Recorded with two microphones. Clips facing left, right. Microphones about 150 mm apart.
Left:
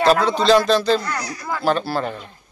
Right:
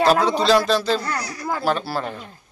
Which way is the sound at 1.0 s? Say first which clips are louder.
Even; 30° right (ahead or behind).